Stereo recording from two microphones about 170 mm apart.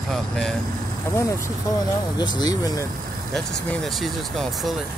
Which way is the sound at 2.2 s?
25° left (ahead or behind).